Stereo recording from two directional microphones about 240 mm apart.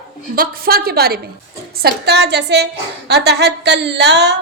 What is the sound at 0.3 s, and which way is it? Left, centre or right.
A woman's voice, right.